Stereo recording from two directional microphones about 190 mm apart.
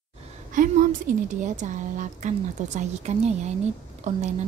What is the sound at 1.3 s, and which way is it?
A woman's voice, 40° right (ahead or behind).